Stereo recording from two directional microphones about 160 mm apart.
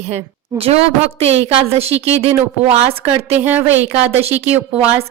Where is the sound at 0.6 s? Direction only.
40° right (ahead or behind).